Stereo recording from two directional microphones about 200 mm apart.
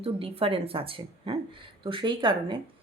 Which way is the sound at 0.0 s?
25° right (ahead or behind).